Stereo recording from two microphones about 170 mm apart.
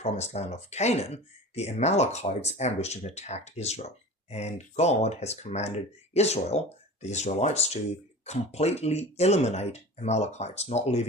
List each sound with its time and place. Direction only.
0.0 s speech: 40° left (ahead or behind)